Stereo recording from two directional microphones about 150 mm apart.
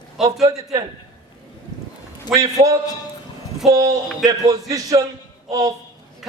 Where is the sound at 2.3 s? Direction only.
25° right (ahead or behind).